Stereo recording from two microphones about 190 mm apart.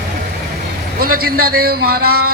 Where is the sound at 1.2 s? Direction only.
50° right (ahead or behind).